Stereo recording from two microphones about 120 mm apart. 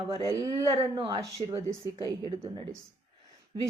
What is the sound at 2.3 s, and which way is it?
A woman's voice, 35° right (ahead or behind).